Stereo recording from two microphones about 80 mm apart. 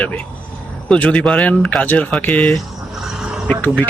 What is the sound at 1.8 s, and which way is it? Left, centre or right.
Speech, left.